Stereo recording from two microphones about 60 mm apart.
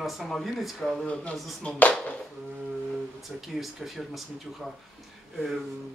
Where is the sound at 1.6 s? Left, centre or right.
Left.